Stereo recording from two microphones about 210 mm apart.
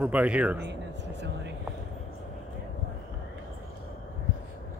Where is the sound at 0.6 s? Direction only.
55° right (ahead or behind).